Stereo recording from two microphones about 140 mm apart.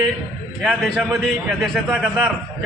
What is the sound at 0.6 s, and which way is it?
A man's voice, 5° right (ahead or behind).